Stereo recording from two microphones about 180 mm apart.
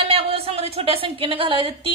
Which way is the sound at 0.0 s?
30° right (ahead or behind).